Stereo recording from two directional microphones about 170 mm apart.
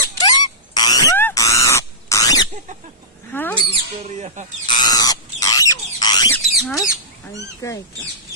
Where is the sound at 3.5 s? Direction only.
40° right (ahead or behind).